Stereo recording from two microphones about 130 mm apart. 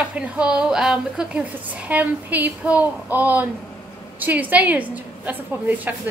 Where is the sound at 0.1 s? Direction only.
10° right (ahead or behind).